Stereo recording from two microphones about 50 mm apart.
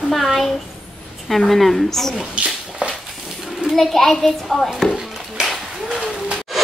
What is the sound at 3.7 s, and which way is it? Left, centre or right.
A child's voice, centre.